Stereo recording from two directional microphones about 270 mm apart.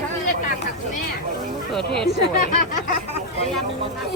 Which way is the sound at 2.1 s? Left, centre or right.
Left.